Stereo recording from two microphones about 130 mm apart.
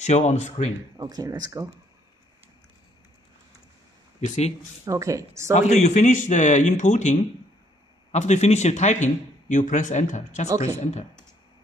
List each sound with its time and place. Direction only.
0.0 s speech: 60° left (ahead or behind)
0.9 s speech: 30° right (ahead or behind)
4.2 s speech: 60° left (ahead or behind)
4.8 s speech: 25° right (ahead or behind)
5.6 s speech: 60° left (ahead or behind)
10.5 s speech: 25° right (ahead or behind)
10.8 s speech: 60° left (ahead or behind)